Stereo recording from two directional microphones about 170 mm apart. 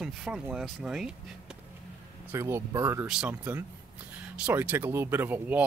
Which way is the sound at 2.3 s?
15° right (ahead or behind).